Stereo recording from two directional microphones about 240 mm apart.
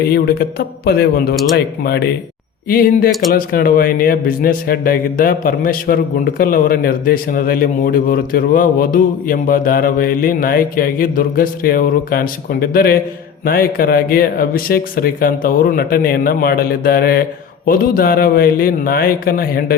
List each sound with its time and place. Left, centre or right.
0.0 s speech: left